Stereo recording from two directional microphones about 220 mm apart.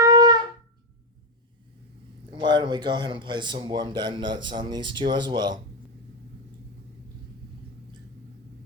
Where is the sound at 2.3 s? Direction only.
20° right (ahead or behind).